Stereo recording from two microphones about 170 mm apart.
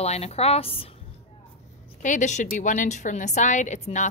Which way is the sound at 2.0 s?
45° left (ahead or behind).